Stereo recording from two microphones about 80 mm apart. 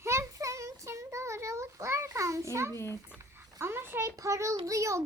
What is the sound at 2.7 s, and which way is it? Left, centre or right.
Speech, left.